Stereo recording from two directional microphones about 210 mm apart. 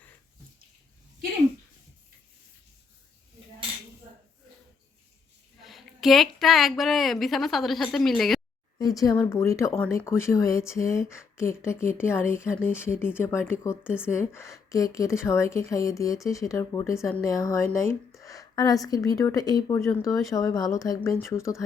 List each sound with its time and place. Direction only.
5.6 s a woman's voice: centre (ahead or behind)
8.8 s a woman's voice: 15° left (ahead or behind)